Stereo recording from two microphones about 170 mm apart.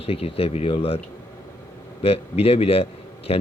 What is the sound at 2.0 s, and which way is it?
Speech, 35° left (ahead or behind).